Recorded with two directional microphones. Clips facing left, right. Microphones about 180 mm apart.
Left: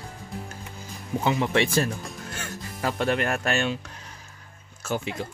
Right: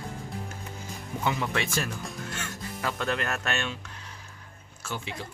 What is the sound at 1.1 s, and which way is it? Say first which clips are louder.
Speech: left 6 dB; 30° left (ahead or behind).